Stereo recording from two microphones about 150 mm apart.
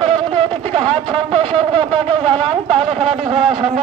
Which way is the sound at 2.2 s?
5° left (ahead or behind).